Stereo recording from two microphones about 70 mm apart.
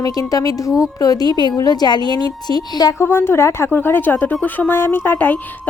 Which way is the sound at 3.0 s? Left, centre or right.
Left.